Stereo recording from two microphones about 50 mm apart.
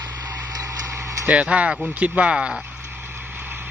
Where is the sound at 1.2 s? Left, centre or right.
Right.